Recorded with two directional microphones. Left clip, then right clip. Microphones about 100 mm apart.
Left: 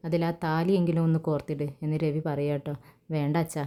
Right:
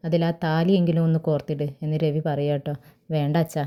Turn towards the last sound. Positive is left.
turn(degrees=-20)  # may be behind; listen again after turning